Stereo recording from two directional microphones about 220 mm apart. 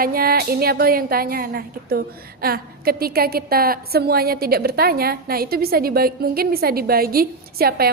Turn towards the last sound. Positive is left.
turn(degrees=-45)  # may be behind; listen again after turning